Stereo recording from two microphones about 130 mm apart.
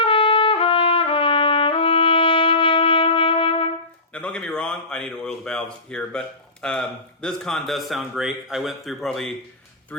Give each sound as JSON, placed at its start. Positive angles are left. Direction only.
{"t": 0.0, "sound": "trumpet", "side_deg": 45}
{"t": 4.1, "sound": "a man's voice", "side_deg": 10}